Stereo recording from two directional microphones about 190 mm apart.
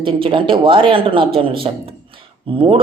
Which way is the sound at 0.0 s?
30° right (ahead or behind).